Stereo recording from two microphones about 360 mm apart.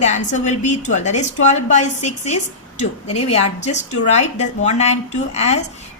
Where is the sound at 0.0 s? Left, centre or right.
Centre.